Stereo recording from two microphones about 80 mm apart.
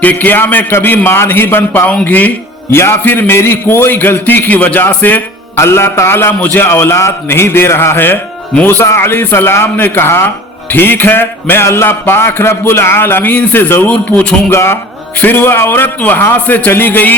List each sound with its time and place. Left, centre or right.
0.0 s a man's voice: left
2.7 s a man's voice: left
5.5 s a man's voice: left; by 14.3 s centre
14.5 s a man's voice: left